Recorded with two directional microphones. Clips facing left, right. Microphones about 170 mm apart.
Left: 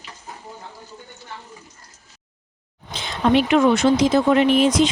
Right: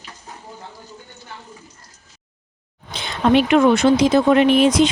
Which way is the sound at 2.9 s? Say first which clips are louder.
Right 2 dB; 60° right (ahead or behind).